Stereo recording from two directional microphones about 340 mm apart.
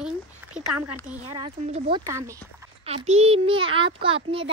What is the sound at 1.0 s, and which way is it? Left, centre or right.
A child's voice, centre.